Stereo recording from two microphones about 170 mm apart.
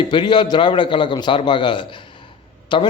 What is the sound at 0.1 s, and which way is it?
A man's voice, 25° left (ahead or behind).